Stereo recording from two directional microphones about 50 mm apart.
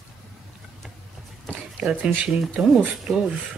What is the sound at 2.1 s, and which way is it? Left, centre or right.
Speech, right.